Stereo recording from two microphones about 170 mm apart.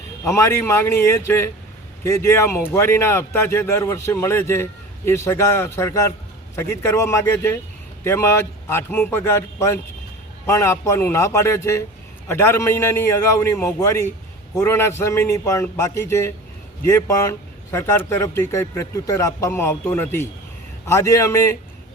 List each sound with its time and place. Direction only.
0.3 s speech: 15° left (ahead or behind)